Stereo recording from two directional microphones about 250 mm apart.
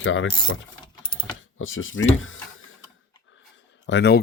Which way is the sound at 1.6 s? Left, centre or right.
Left.